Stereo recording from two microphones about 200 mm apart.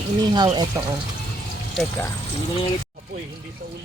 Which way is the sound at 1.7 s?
5° left (ahead or behind).